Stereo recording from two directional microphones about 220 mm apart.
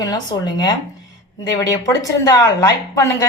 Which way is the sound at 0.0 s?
20° left (ahead or behind).